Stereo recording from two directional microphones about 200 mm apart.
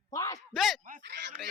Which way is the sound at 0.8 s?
50° right (ahead or behind).